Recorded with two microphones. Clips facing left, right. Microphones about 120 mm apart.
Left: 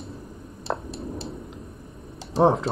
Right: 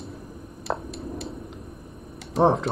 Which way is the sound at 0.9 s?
30° left (ahead or behind).